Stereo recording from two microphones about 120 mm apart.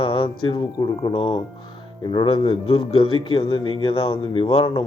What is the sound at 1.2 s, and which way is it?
Speech, 50° left (ahead or behind).